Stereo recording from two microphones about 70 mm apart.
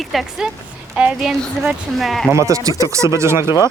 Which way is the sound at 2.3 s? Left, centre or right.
Right.